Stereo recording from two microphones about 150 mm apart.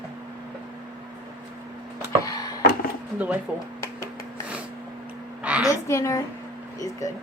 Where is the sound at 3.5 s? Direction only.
10° right (ahead or behind).